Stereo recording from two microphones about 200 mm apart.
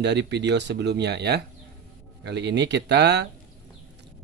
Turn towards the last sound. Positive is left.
turn(degrees=-55)  # may be behind; listen again after turning